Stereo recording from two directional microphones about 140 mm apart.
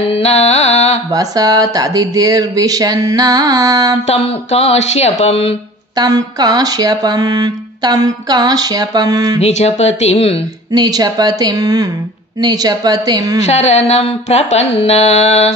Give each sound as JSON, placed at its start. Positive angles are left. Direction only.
{"t": 0.1, "sound": "carnatic music", "side_deg": 50}
{"t": 1.1, "sound": "speech", "side_deg": -25}
{"t": 4.1, "sound": "mantra", "side_deg": 45}
{"t": 5.9, "sound": "speech", "side_deg": -30}
{"t": 9.4, "sound": "mantra", "side_deg": 50}
{"t": 10.7, "sound": "speech", "side_deg": -25}
{"t": 13.4, "sound": "mantra", "side_deg": 50}